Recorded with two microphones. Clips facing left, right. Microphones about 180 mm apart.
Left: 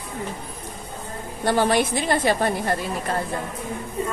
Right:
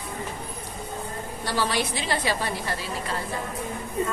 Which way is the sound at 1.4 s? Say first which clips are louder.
Left 7 dB; 50° left (ahead or behind).